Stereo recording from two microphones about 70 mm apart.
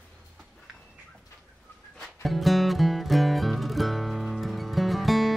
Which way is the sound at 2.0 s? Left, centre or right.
Centre.